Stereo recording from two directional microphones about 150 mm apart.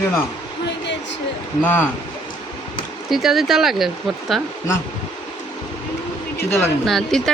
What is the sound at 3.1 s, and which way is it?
Speech, centre (ahead or behind).